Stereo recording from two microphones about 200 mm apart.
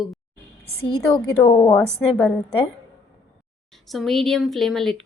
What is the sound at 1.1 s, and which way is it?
A woman's voice, 20° left (ahead or behind).